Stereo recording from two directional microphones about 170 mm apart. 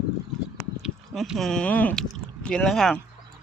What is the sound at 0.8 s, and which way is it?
Speech, centre (ahead or behind).